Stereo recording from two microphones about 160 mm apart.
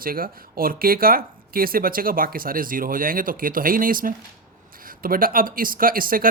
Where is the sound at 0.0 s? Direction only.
65° right (ahead or behind).